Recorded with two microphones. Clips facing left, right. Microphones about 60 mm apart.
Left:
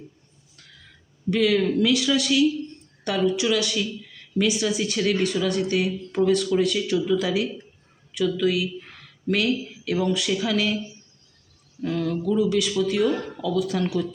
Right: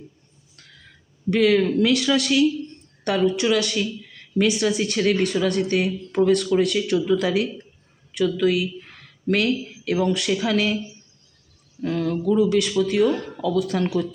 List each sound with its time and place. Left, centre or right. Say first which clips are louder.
1.3 s a woman's voice: right 3 dB; right
11.8 s a woman's voice: right 2 dB; right